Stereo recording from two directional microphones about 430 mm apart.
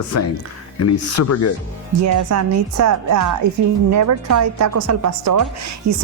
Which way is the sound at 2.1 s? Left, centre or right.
Right.